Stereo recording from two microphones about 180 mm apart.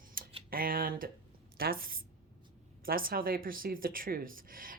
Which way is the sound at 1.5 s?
55° right (ahead or behind).